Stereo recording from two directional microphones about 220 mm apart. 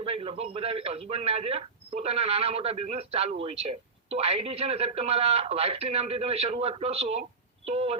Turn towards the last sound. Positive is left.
turn(degrees=-25)  # may be behind; listen again after turning